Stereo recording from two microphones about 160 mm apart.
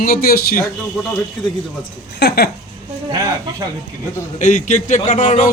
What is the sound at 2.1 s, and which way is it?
Speech, 85° left.